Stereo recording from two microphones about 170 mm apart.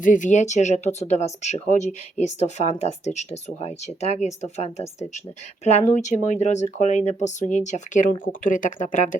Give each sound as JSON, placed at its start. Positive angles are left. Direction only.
{"t": 0.0, "sound": "speech", "side_deg": 50}